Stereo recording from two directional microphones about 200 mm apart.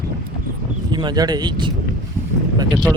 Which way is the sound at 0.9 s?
20° right (ahead or behind).